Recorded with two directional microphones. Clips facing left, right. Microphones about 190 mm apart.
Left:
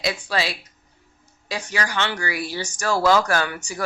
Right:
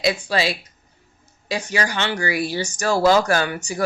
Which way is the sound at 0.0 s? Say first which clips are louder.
Right 4 dB; 20° right (ahead or behind).